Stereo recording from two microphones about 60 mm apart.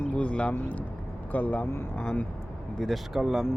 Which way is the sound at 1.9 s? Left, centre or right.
Centre.